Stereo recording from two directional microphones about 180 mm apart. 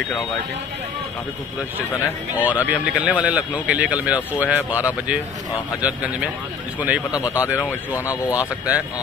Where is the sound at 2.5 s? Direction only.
10° right (ahead or behind).